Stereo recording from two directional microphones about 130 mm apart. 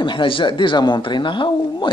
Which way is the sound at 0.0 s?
40° left (ahead or behind).